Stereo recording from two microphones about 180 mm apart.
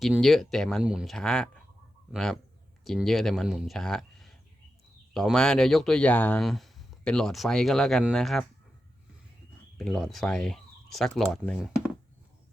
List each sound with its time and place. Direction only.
0.0 s speech: centre (ahead or behind)
9.7 s speech: centre (ahead or behind)